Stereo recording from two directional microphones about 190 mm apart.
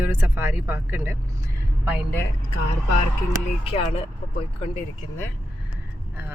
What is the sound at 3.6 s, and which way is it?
Speech, 30° left (ahead or behind).